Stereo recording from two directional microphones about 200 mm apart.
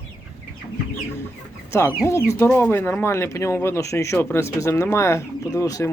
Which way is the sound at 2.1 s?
15° left (ahead or behind).